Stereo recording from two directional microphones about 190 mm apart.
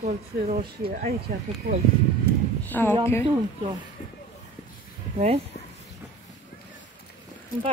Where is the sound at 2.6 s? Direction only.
10° left (ahead or behind).